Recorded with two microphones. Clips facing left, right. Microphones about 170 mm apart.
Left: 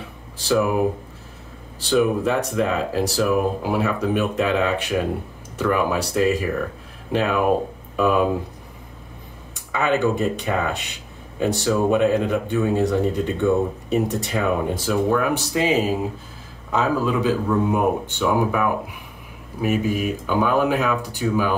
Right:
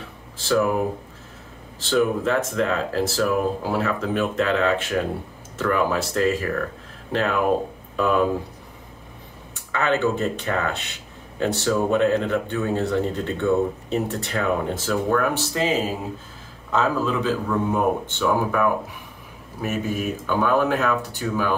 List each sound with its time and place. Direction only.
0.5 s speech: 10° left (ahead or behind)
1.9 s speech: 10° left (ahead or behind)
9.7 s speech: 10° left (ahead or behind)